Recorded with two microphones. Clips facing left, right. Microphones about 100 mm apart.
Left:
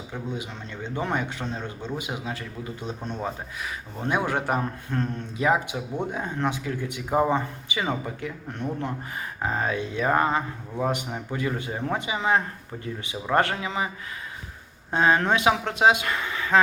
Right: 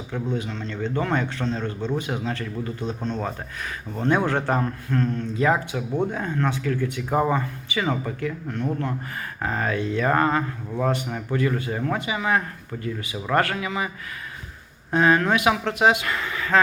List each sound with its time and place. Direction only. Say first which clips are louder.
0.1 s speech: right 6 dB; 15° left (ahead or behind)
14.9 s speech: right 2 dB; 25° left (ahead or behind)